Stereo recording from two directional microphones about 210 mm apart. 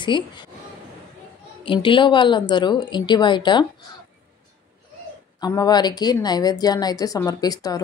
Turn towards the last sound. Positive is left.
turn(degrees=20)  # may be behind; listen again after turning